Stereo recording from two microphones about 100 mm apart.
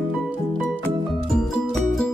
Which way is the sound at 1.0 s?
Centre (ahead or behind).